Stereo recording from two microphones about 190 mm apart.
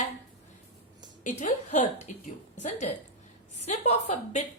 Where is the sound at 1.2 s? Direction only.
35° left (ahead or behind).